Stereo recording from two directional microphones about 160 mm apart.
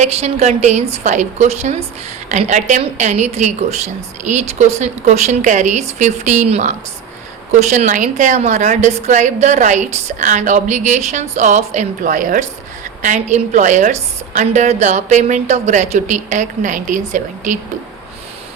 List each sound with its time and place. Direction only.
0.0 s a woman's voice: 40° right (ahead or behind)